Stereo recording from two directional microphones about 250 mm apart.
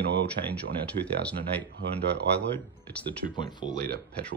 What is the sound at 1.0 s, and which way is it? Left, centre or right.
Speech, right.